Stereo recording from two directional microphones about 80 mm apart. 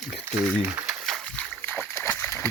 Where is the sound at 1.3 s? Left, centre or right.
Centre.